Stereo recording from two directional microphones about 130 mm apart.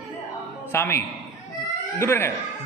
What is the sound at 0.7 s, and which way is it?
Speech, 20° left (ahead or behind).